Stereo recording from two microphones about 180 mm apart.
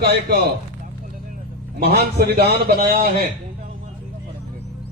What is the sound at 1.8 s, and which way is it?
A man's voice, 60° right (ahead or behind).